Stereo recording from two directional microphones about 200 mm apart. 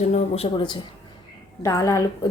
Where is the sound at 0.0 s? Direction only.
30° left (ahead or behind).